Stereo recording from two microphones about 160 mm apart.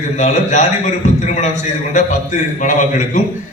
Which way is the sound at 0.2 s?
45° left (ahead or behind).